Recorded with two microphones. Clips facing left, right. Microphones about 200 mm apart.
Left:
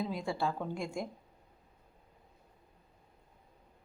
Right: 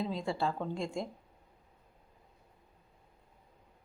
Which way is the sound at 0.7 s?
25° right (ahead or behind).